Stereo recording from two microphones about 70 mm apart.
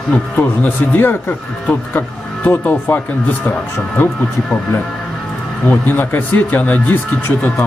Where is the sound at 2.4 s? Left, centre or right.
Left.